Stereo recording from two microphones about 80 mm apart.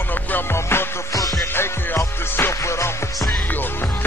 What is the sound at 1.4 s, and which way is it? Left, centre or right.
Music, left.